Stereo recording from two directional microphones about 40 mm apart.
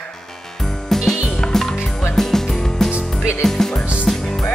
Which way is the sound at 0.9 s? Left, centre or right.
Centre.